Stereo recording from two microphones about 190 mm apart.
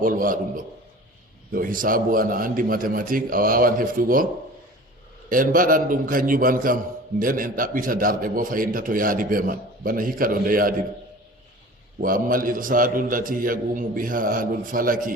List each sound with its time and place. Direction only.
0.0 s a man's voice: 45° right (ahead or behind)
5.3 s a man's voice: 45° right (ahead or behind)
11.9 s a man's voice: 45° right (ahead or behind)